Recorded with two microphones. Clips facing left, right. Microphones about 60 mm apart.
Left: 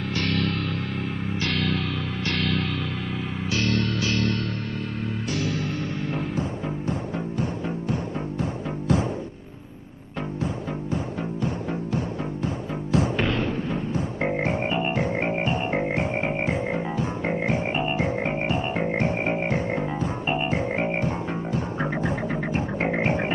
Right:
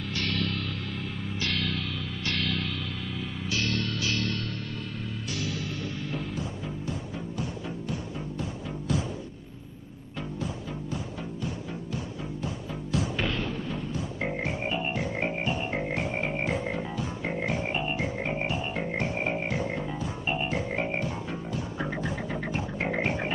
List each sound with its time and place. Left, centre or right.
0.1 s music: left
7.9 s music: left
12.9 s music: left